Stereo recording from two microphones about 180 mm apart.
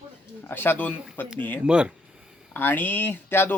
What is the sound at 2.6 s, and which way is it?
Speech, 10° left (ahead or behind).